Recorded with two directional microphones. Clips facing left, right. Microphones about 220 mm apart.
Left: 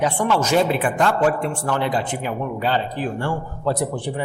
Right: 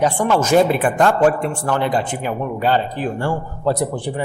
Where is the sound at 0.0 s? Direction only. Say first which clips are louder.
Right 3 dB; 45° right (ahead or behind).